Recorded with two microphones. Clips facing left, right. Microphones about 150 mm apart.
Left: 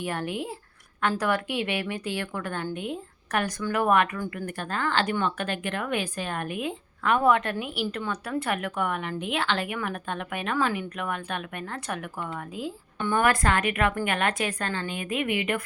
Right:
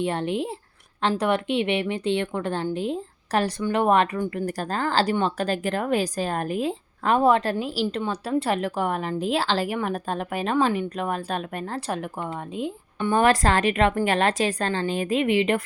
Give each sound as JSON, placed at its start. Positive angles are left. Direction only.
{"t": 0.0, "sound": "a woman's voice", "side_deg": -25}